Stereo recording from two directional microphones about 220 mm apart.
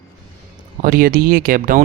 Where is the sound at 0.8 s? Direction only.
40° right (ahead or behind).